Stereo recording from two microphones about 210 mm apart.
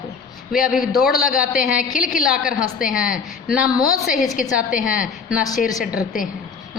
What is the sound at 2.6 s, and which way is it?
Speech, 40° left (ahead or behind).